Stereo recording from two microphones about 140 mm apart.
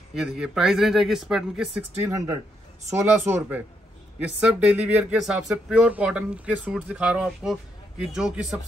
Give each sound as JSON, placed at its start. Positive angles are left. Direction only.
{"t": 0.1, "sound": "speech", "side_deg": -5}
{"t": 2.0, "sound": "speech", "side_deg": -25}